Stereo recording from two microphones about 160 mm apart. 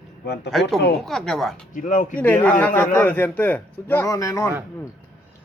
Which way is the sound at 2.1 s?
10° left (ahead or behind).